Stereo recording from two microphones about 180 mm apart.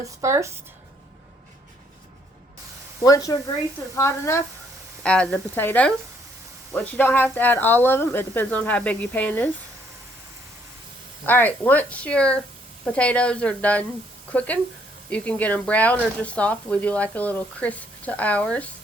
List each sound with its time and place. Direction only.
0.2 s a woman's voice: 15° right (ahead or behind)
3.0 s speech: 20° left (ahead or behind)
11.3 s speech: 10° left (ahead or behind)